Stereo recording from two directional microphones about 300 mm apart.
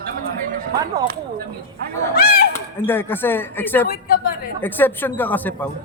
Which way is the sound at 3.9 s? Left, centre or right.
Left.